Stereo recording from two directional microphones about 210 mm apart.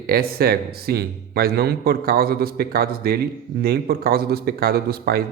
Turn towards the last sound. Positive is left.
turn(degrees=-45)  # may be behind; listen again after turning